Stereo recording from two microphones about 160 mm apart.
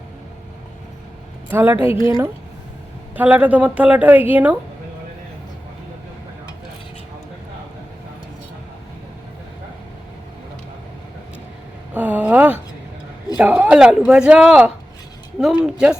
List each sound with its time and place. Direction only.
1.5 s a woman's voice: 15° right (ahead or behind)
11.9 s a sound: 10° right (ahead or behind)
13.3 s a man's voice: 10° right (ahead or behind)